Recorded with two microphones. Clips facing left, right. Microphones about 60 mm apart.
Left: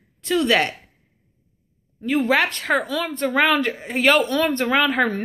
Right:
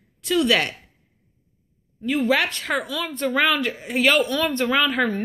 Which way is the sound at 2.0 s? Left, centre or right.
Left.